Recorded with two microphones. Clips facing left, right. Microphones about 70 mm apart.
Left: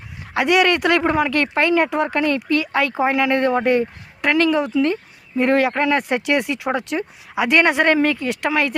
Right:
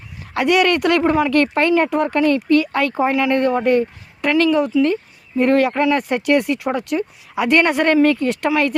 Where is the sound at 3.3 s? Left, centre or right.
Left.